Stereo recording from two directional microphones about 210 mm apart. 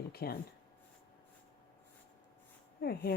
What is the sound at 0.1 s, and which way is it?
Speech, 45° left (ahead or behind).